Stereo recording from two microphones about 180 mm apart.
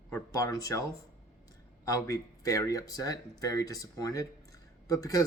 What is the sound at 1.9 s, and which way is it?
Speech, 20° left (ahead or behind).